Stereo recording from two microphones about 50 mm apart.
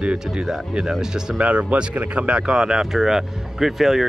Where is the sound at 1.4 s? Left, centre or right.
Right.